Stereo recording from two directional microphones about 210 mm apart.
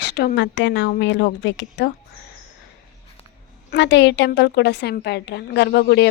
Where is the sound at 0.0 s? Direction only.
55° left (ahead or behind).